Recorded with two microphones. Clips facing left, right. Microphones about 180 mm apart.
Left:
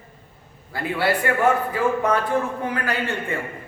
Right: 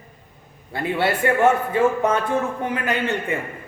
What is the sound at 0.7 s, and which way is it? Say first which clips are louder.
A man's voice: right 1 dB; 25° right (ahead or behind).